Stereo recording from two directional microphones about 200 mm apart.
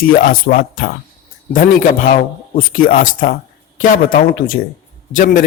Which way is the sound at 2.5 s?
45° left (ahead or behind).